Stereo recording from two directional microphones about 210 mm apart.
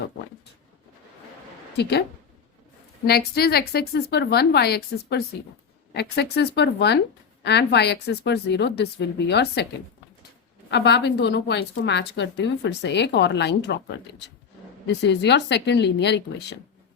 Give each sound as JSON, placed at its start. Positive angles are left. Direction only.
{"t": 1.7, "sound": "a woman's voice", "side_deg": 50}
{"t": 3.1, "sound": "a woman's voice", "side_deg": 50}
{"t": 10.7, "sound": "a woman's voice", "side_deg": 55}